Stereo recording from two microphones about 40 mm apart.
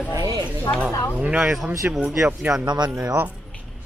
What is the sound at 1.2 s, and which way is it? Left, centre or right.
Speech, right.